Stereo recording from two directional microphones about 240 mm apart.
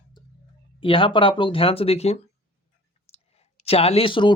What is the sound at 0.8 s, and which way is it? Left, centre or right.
Speech, left.